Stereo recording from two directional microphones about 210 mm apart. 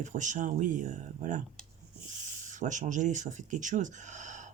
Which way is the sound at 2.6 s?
35° right (ahead or behind).